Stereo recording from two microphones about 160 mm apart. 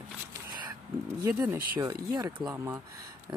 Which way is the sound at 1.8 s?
25° right (ahead or behind).